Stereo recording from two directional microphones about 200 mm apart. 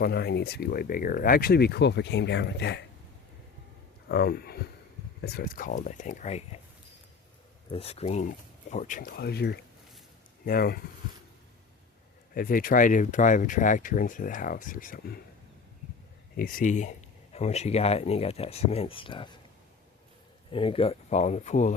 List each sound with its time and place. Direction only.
0.0 s speech: 50° left (ahead or behind)
4.1 s speech: 50° left (ahead or behind); by 6.6 s 35° left (ahead or behind)
7.7 s speech: 30° left (ahead or behind); by 10.8 s 50° left (ahead or behind)
12.3 s speech: 45° left (ahead or behind)
16.3 s speech: 45° left (ahead or behind); by 19.3 s 25° left (ahead or behind)
20.5 s speech: 25° left (ahead or behind)